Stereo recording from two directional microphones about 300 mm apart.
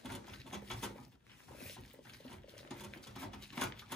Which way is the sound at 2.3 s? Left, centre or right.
Centre.